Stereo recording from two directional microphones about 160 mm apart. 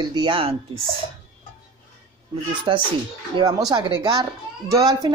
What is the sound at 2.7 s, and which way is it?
A child's voice, 30° right (ahead or behind).